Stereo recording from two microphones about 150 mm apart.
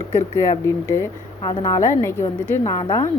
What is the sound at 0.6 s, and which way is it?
A woman's voice, 20° left (ahead or behind).